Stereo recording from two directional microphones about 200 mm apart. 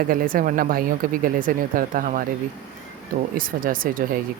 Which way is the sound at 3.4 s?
45° right (ahead or behind).